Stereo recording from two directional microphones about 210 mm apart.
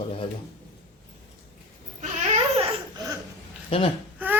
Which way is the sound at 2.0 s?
30° right (ahead or behind).